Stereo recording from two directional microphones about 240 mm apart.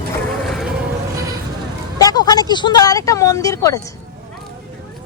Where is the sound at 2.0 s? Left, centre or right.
Centre.